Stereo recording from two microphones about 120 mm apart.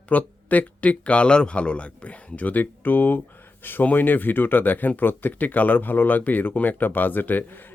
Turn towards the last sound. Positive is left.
turn(degrees=15)  # may be behind; listen again after turning